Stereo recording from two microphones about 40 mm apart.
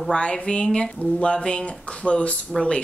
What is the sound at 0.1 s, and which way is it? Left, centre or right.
Speech, left.